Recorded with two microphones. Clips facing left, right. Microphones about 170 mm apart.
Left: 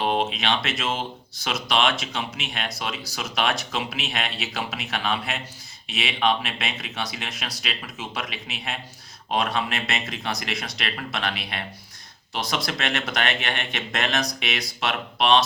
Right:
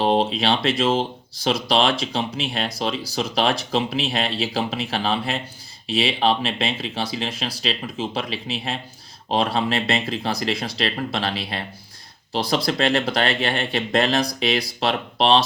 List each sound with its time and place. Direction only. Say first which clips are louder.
0.0 s speech: right 5 dB; 35° right (ahead or behind)